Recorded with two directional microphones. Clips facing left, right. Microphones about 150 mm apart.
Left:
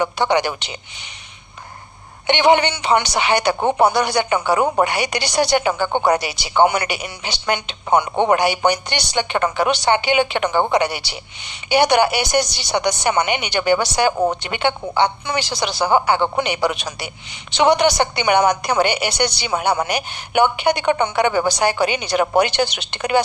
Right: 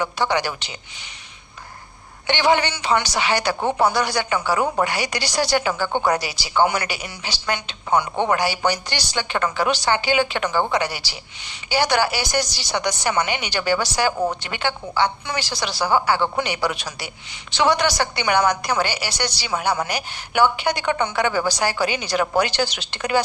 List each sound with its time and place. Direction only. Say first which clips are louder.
0.0 s a woman's voice: left 4 dB; 20° left (ahead or behind)
2.2 s a woman's voice: left 4 dB; 20° left (ahead or behind)
22.7 s speech: left 2 dB; 65° left (ahead or behind)